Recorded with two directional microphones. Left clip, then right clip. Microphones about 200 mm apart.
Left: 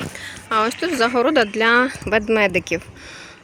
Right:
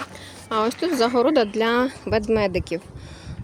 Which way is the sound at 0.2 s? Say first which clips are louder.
Left 4 dB; 10° right (ahead or behind).